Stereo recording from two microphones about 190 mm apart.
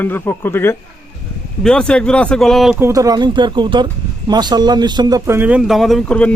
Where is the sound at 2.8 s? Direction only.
15° right (ahead or behind).